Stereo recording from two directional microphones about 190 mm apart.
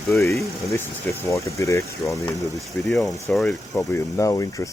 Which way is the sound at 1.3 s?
15° left (ahead or behind).